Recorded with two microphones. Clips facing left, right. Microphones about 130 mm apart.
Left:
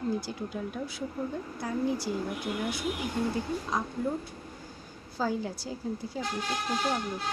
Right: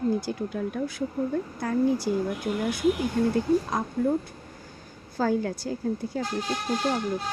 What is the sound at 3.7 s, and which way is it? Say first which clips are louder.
Speech: right 4 dB; 50° right (ahead or behind).